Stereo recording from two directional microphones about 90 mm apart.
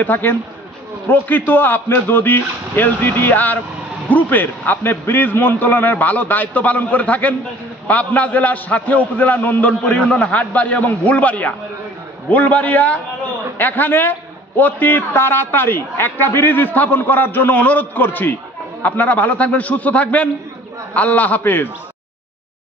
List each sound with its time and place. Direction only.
0.0 s a man's voice: 20° left (ahead or behind)